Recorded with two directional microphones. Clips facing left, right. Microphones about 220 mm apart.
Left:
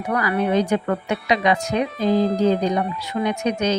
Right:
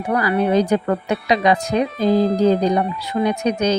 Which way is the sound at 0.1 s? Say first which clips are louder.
Right 3 dB; 35° right (ahead or behind).